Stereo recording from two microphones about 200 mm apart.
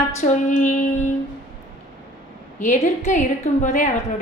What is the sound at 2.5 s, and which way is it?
A woman's voice, 40° left (ahead or behind).